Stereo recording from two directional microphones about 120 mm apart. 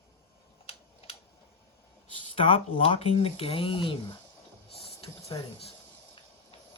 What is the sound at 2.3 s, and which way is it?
Speech, 50° left (ahead or behind).